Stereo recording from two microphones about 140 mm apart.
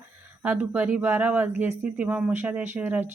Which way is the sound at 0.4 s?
10° right (ahead or behind).